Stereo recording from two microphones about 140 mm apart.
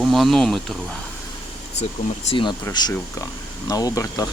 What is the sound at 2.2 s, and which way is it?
Speech, 35° left (ahead or behind).